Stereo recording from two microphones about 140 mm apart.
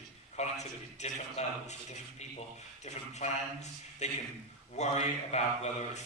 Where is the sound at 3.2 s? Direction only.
55° left (ahead or behind).